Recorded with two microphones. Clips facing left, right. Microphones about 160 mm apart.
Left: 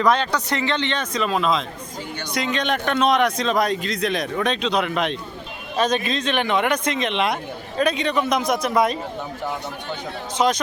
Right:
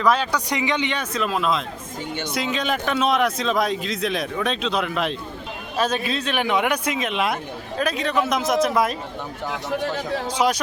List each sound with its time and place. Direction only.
0.0 s a man's voice: 5° right (ahead or behind)
9.5 s speech: 90° right
9.9 s speech: 10° right (ahead or behind)